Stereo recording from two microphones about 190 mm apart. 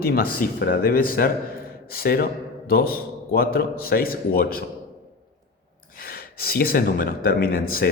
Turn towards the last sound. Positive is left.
turn(degrees=50)  # may be behind; listen again after turning